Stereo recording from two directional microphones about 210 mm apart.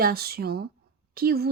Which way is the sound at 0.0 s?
45° right (ahead or behind).